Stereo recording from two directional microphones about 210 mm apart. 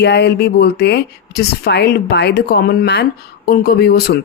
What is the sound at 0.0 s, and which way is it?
Speech, 55° left (ahead or behind).